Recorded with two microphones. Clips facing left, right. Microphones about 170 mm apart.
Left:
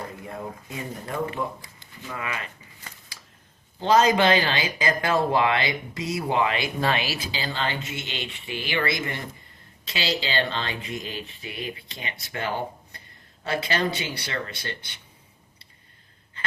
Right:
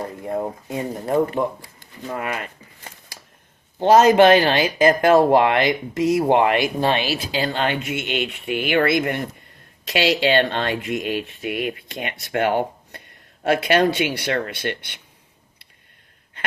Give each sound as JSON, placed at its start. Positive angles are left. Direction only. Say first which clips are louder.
{"t": 0.3, "sound": "speech", "louder": "right 10 dB", "side_deg": -45}
{"t": 3.8, "sound": "speech", "louder": "right 7 dB", "side_deg": -55}
{"t": 6.7, "sound": "speech", "louder": "right 5 dB", "side_deg": -30}
{"t": 7.3, "sound": "speech", "louder": "right 8 dB", "side_deg": -60}